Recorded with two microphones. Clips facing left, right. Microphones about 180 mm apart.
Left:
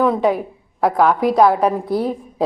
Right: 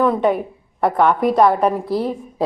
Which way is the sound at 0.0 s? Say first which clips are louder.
Even; centre (ahead or behind).